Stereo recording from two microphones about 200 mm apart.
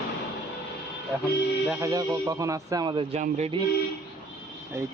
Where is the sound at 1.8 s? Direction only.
15° right (ahead or behind).